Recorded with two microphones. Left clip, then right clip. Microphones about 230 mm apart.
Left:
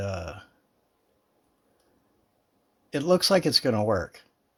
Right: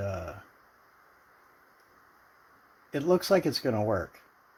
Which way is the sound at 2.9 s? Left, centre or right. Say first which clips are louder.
Left 3 dB; left.